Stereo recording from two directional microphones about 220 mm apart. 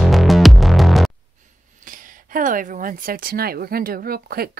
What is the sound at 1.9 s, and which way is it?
Speech, 40° right (ahead or behind).